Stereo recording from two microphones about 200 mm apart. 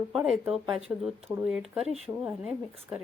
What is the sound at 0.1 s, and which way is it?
Speech, centre (ahead or behind).